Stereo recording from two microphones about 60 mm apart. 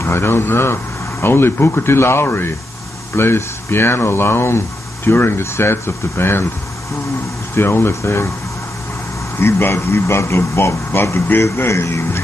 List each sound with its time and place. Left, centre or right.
0.0 s speech: left
7.5 s speech: left
9.4 s speech: left